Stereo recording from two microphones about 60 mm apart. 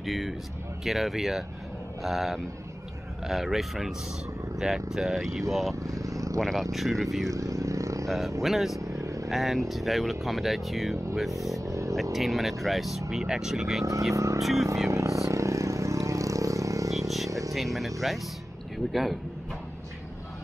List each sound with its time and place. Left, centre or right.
0.0 s speech: centre
5.9 s vehicle: right
6.4 s speech: centre
7.2 s vehicle: right
8.4 s speech: centre
8.8 s vehicle: right
9.3 s speech: centre
11.6 s vehicle: right
11.9 s speech: centre
14.1 s speech: right
14.4 s speech: centre
14.9 s vehicle: right
17.5 s speech: centre